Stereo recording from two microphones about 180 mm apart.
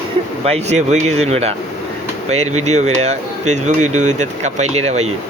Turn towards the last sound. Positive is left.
turn(degrees=-40)  # may be behind; listen again after turning